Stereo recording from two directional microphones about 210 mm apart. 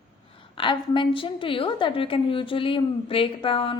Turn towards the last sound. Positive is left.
turn(degrees=25)  # may be behind; listen again after turning